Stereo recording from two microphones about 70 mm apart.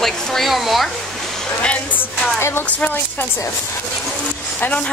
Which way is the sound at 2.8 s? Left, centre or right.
Left.